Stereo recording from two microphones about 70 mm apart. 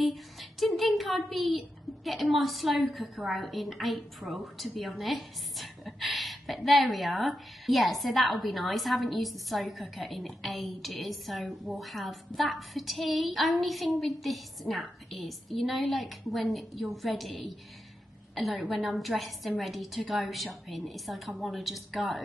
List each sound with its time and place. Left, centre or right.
0.0 s a woman's voice: centre